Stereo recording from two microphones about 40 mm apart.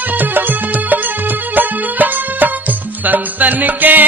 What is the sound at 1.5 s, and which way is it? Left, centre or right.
Music, right.